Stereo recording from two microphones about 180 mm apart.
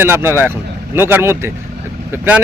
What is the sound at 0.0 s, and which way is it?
Speech, 10° right (ahead or behind).